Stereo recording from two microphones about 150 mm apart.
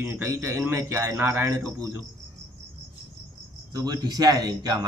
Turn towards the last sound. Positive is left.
turn(degrees=-25)  # may be behind; listen again after turning